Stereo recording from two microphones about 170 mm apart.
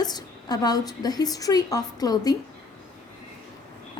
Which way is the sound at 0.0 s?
25° left (ahead or behind).